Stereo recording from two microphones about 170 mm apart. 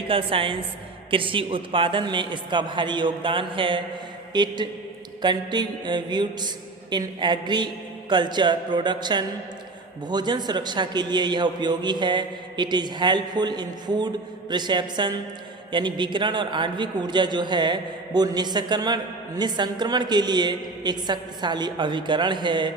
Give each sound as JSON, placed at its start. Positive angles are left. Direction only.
{"t": 0.1, "sound": "a woman's voice", "side_deg": -30}